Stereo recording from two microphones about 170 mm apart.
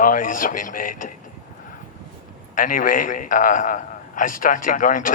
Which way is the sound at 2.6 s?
50° left (ahead or behind).